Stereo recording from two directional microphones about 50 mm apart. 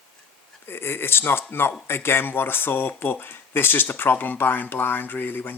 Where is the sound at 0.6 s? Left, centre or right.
Left.